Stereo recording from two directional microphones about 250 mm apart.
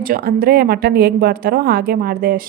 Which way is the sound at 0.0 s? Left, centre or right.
Right.